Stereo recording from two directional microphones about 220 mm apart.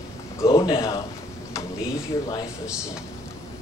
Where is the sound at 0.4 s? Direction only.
15° left (ahead or behind).